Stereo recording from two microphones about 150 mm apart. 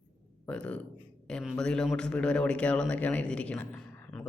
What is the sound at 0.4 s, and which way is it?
A man's voice, 10° left (ahead or behind).